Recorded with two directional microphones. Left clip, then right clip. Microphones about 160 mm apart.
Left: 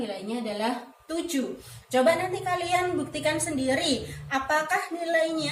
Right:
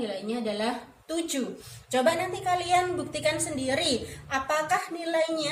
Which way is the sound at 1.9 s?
35° right (ahead or behind).